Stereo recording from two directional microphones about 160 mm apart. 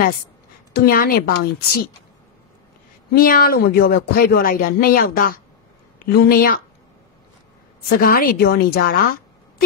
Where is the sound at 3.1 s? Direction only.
65° left (ahead or behind).